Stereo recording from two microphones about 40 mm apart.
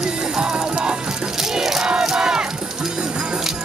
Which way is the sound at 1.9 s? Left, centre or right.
Centre.